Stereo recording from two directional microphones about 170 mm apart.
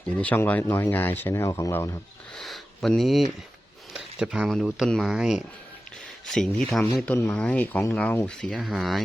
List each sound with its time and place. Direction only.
0.2 s speech: 10° left (ahead or behind)
2.3 s a sound: centre (ahead or behind)
3.9 s speech: 5° right (ahead or behind)